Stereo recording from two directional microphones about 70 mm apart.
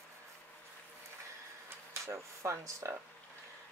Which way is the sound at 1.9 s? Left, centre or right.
Right.